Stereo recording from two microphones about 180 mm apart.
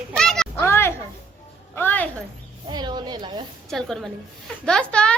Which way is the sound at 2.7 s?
25° right (ahead or behind).